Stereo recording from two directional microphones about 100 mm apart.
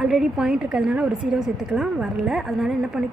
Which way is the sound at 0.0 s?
5° right (ahead or behind).